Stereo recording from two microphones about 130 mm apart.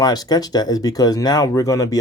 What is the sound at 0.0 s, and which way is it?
Speech, 30° left (ahead or behind).